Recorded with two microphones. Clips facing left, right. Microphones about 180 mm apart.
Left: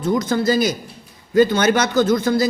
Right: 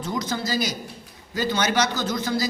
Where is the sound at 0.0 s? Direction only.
50° left (ahead or behind).